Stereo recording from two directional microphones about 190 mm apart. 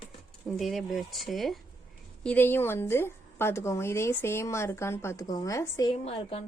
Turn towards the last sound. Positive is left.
turn(degrees=30)  # may be behind; listen again after turning